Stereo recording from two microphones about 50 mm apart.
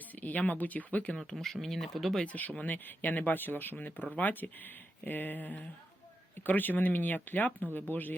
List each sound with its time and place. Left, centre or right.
0.2 s speech: left
1.1 s speech: centre
2.2 s speech: left